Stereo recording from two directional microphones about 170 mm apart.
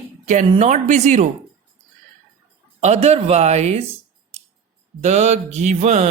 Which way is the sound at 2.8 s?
40° right (ahead or behind).